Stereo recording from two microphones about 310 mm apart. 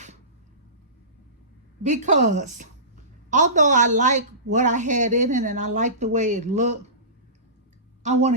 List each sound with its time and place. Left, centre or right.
1.9 s a woman's voice: right
8.0 s a woman's voice: right